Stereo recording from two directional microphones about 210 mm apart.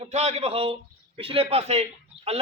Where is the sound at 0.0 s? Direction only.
30° right (ahead or behind).